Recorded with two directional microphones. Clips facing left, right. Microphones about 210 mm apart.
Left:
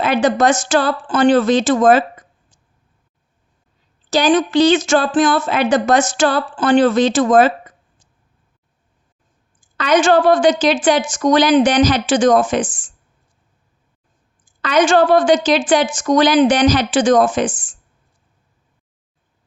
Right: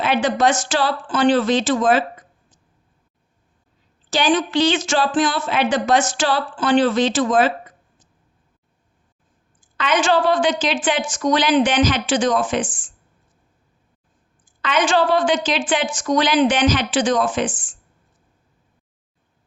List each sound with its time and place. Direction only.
0.0 s a woman's voice: 45° left (ahead or behind)
4.1 s a woman's voice: 40° left (ahead or behind)
9.7 s a woman's voice: 40° left (ahead or behind)
14.6 s a woman's voice: 40° left (ahead or behind)